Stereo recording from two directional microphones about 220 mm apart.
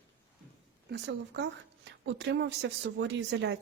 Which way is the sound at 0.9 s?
50° right (ahead or behind).